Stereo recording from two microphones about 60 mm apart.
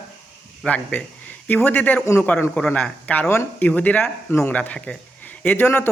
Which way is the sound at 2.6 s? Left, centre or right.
Centre.